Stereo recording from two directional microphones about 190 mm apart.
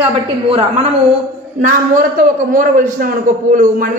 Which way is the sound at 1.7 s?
45° right (ahead or behind).